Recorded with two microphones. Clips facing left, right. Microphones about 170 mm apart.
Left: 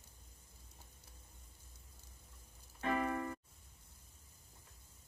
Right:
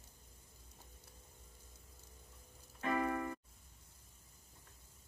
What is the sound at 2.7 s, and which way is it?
Music, 30° left (ahead or behind).